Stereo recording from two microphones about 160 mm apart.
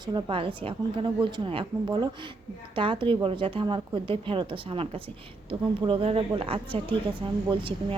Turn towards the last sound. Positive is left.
turn(degrees=-30)  # may be behind; listen again after turning